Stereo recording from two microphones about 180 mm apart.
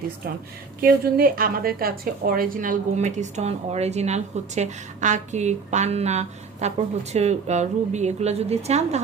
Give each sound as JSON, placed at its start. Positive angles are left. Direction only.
{"t": 0.8, "sound": "a woman's voice", "side_deg": -55}